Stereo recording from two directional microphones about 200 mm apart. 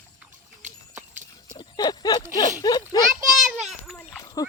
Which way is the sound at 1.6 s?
20° left (ahead or behind).